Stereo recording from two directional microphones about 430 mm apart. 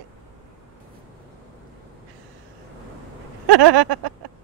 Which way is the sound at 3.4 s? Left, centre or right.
Right.